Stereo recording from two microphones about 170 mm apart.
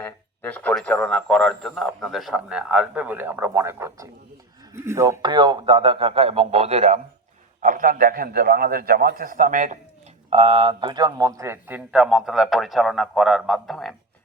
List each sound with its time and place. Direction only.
0.0 s a man's voice: 10° left (ahead or behind); by 7.0 s 40° right (ahead or behind)
7.6 s a man's voice: 50° right (ahead or behind)
10.2 s a man's voice: 35° right (ahead or behind); by 13.9 s centre (ahead or behind)